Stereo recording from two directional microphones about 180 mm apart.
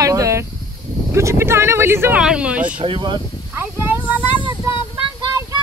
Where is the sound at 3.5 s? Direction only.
10° right (ahead or behind).